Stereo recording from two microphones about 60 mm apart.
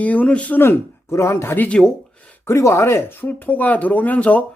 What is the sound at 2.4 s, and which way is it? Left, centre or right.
Speech, left.